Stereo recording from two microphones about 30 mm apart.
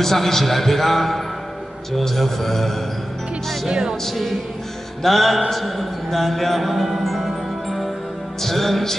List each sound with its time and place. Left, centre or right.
0.0 s a man's voice: centre
3.6 s music: right
4.1 s music: centre
8.4 s a man's voice: centre